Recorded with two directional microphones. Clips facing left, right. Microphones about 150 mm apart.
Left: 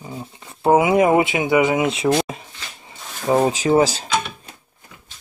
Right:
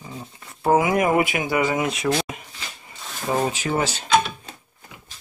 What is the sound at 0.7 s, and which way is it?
Speech, 20° left (ahead or behind).